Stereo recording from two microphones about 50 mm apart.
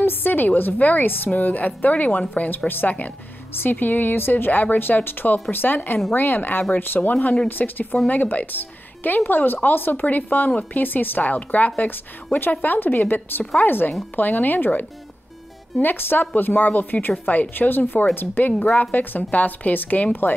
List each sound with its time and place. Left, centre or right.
0.0 s speech: left
7.0 s speech: left
7.4 s speech: left